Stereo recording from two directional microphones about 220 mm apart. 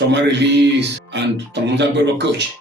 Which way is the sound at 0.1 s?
50° right (ahead or behind).